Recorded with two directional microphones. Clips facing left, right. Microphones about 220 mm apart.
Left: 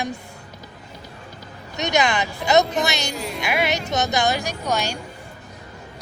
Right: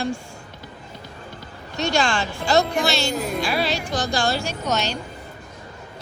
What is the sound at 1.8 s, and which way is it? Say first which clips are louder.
Speech: left 1 dB; 20° left (ahead or behind).